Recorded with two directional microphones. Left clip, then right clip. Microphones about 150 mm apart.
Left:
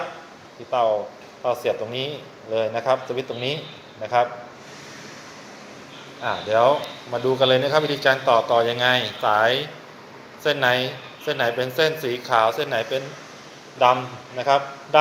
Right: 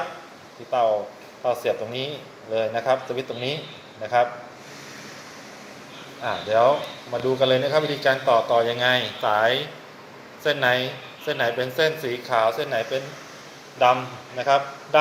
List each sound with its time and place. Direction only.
0.7 s a man's voice: 10° left (ahead or behind)
6.2 s a man's voice: 10° left (ahead or behind)